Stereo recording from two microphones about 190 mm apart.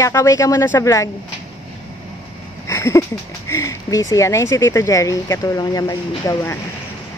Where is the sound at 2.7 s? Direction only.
15° left (ahead or behind).